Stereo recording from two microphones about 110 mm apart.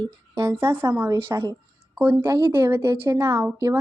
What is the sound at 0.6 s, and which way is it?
Speech, 25° right (ahead or behind).